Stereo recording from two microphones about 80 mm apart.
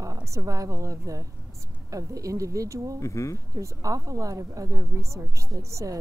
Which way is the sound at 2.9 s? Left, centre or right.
Left.